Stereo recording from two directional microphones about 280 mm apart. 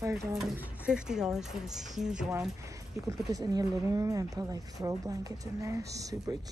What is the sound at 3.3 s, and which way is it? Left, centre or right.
A woman's voice, centre.